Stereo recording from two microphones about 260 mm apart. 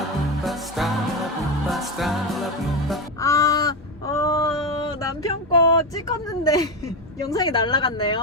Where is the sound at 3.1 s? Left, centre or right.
Centre.